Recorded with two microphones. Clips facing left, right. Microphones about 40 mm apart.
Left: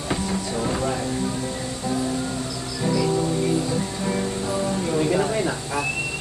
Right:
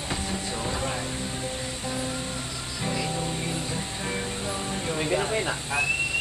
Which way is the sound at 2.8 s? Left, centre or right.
Right.